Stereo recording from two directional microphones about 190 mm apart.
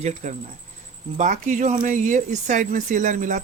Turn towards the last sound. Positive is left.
turn(degrees=-40)  # may be behind; listen again after turning